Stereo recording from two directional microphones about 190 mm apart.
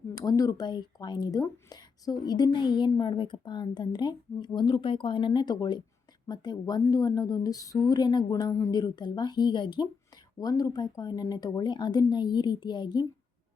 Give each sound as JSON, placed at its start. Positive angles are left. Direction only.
{"t": 0.1, "sound": "speech", "side_deg": 20}